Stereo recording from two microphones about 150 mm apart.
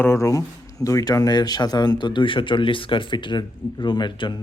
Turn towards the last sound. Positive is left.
turn(degrees=30)  # may be behind; listen again after turning